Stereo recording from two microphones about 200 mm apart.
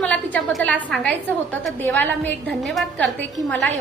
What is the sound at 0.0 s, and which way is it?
A woman's voice, 5° left (ahead or behind).